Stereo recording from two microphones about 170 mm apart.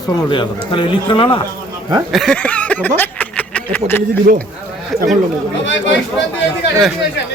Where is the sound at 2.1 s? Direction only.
5° left (ahead or behind).